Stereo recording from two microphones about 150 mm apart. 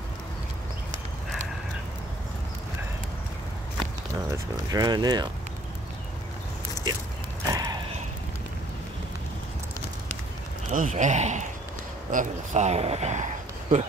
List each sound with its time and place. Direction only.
4.3 s speech: 25° right (ahead or behind)
7.4 s a sound: 20° right (ahead or behind)
10.7 s speech: 55° right (ahead or behind)